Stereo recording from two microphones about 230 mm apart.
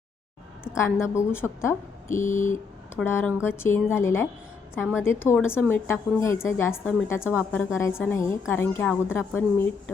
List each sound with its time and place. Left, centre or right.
0.8 s a woman's voice: centre
2.1 s a sound: left
3.1 s a woman's voice: centre
4.8 s a woman's voice: centre
5.0 s a woman's voice: centre